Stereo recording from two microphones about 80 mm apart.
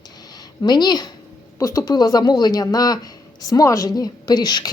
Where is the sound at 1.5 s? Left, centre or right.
Left.